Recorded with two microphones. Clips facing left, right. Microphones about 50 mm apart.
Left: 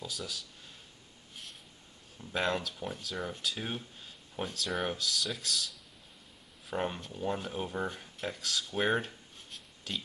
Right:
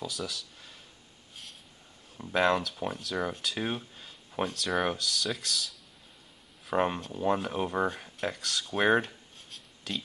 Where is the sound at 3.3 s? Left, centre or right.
Right.